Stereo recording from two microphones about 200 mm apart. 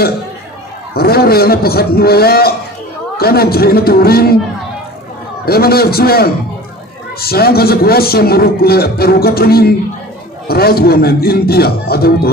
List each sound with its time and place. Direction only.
0.9 s a man's voice: 50° left (ahead or behind)
5.4 s a man's voice: 50° left (ahead or behind)